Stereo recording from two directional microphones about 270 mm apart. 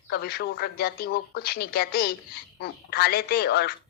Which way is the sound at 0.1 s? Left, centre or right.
Left.